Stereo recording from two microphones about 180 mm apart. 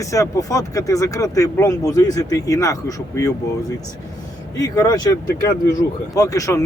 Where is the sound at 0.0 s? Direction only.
20° left (ahead or behind).